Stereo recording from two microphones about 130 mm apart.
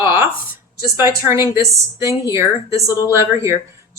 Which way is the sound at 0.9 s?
20° right (ahead or behind).